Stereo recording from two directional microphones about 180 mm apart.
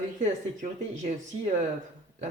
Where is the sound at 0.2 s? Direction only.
45° right (ahead or behind).